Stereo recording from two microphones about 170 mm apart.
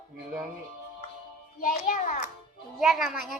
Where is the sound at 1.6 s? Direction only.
55° left (ahead or behind).